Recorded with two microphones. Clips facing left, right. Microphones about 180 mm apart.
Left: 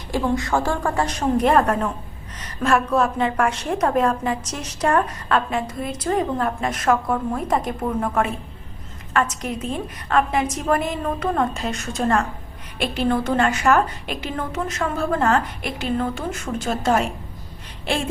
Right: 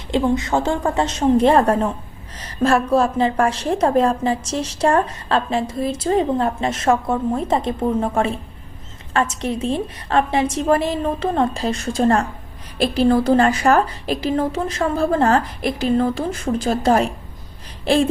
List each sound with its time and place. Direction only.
0.1 s a woman's voice: 20° right (ahead or behind)